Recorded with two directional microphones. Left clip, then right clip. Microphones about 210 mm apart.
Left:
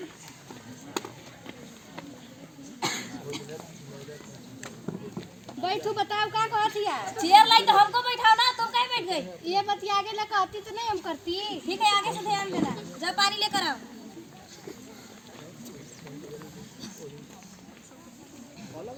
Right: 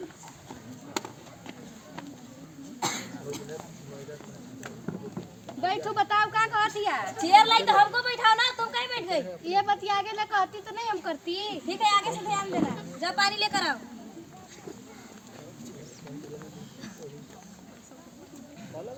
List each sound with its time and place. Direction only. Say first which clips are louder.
2.8 s cough: left 1 dB; 30° right (ahead or behind)
4.9 s a sound: left 1 dB; centre (ahead or behind)
6.7 s a child's voice: even; centre (ahead or behind)